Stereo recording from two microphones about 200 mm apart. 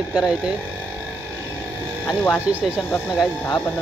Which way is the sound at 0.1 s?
5° right (ahead or behind).